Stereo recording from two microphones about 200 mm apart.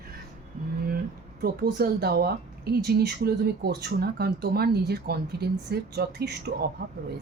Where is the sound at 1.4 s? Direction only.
55° right (ahead or behind).